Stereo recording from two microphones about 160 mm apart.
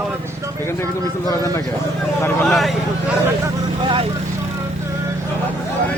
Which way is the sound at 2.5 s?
Centre (ahead or behind).